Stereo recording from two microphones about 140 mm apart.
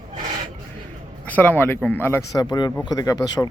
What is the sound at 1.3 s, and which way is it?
Speech, 15° left (ahead or behind).